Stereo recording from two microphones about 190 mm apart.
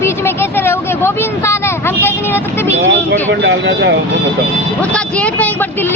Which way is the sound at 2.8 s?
70° right (ahead or behind).